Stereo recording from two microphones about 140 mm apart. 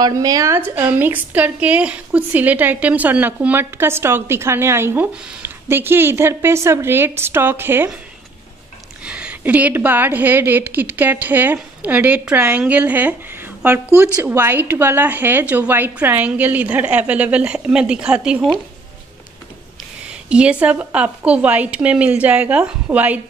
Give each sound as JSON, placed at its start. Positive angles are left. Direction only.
{"t": 0.0, "sound": "a woman's voice", "side_deg": -25}
{"t": 9.0, "sound": "a woman's voice", "side_deg": -10}
{"t": 20.1, "sound": "a woman's voice", "side_deg": -10}